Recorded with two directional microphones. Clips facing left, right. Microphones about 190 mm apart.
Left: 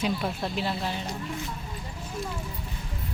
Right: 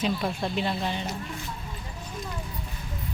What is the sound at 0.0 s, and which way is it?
Speech, centre (ahead or behind).